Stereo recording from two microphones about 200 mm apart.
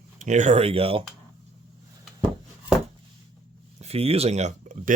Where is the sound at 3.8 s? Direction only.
30° right (ahead or behind).